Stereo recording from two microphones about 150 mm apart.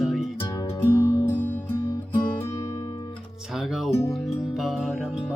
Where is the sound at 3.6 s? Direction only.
Centre (ahead or behind).